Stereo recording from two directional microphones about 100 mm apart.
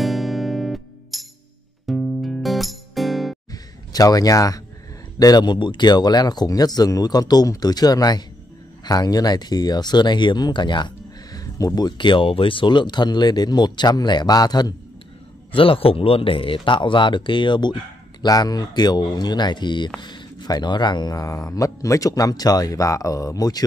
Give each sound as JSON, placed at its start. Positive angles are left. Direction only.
{"t": 0.0, "sound": "music", "side_deg": 0}
{"t": 3.5, "sound": "a sound", "side_deg": 40}
{"t": 5.2, "sound": "speech", "side_deg": 45}
{"t": 11.3, "sound": "speech", "side_deg": 35}
{"t": 15.5, "sound": "speech", "side_deg": 65}